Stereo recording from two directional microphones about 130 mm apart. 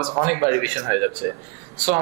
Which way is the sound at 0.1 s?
25° right (ahead or behind).